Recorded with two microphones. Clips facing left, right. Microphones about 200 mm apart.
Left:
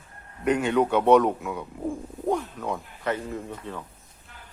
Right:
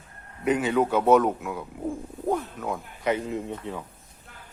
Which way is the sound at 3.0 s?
15° right (ahead or behind).